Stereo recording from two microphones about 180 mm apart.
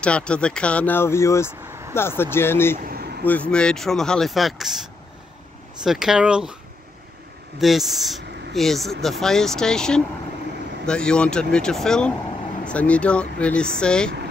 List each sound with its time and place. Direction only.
0.0 s speech: 5° left (ahead or behind)
2.8 s a sound: 55° right (ahead or behind)
3.3 s speech: 5° left (ahead or behind)
5.9 s speech: 5° right (ahead or behind)
7.6 s speech: centre (ahead or behind)